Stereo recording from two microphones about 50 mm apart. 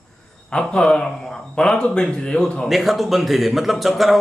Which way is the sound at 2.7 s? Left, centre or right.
Centre.